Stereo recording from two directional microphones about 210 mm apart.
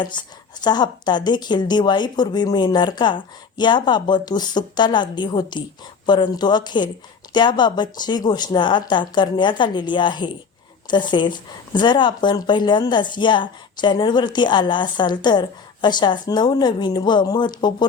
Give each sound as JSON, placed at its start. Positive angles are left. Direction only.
{"t": 0.0, "sound": "a woman's voice", "side_deg": 20}